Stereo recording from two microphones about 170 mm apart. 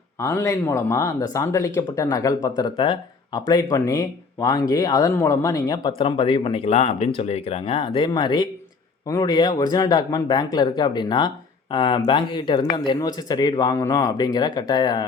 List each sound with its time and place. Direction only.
0.2 s speech: 15° left (ahead or behind)